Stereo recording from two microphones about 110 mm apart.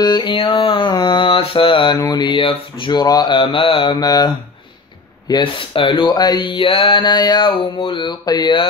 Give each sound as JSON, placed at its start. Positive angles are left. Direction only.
{"t": 0.0, "sound": "a sound", "side_deg": 40}
{"t": 0.3, "sound": "speech", "side_deg": 55}
{"t": 2.0, "sound": "speech", "side_deg": 40}
{"t": 4.0, "sound": "speech", "side_deg": 35}
{"t": 5.3, "sound": "speech", "side_deg": 50}